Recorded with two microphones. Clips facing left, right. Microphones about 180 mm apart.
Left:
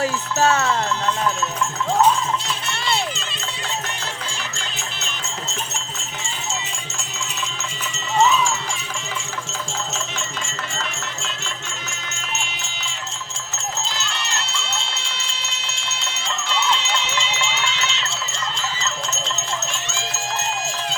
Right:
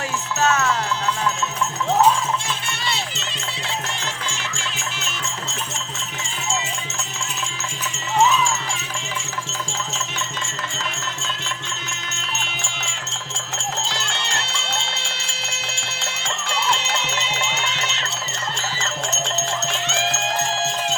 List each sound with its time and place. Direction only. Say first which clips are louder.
0.0 s music: left 3 dB; 35° left (ahead or behind)
13.6 s jingle bell: even; 85° right
15.3 s music: right 2 dB; 80° right
17.3 s music: even; 50° right (ahead or behind)
18.5 s music: even; 70° right (ahead or behind)